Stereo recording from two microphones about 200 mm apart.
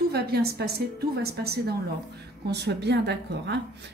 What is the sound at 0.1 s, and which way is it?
A woman's voice, 50° right (ahead or behind).